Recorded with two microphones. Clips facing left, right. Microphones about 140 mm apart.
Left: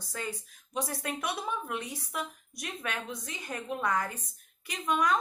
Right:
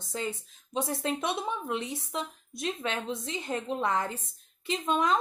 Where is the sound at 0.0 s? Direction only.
25° right (ahead or behind).